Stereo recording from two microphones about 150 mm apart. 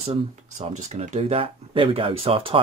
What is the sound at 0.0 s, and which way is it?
Speech, 45° right (ahead or behind).